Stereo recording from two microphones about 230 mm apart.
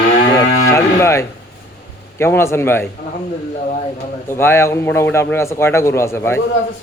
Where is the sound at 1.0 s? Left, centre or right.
Centre.